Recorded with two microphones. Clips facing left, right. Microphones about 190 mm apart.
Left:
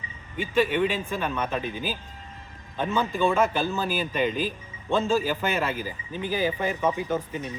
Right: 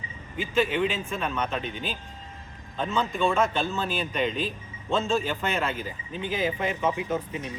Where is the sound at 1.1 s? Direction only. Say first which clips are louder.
Left 1 dB; 5° left (ahead or behind).